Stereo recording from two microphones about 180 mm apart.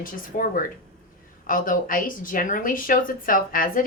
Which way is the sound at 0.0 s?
50° left (ahead or behind).